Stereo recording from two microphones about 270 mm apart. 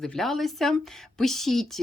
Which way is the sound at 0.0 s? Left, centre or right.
Centre.